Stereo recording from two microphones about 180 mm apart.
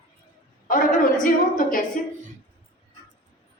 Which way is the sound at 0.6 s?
50° left (ahead or behind).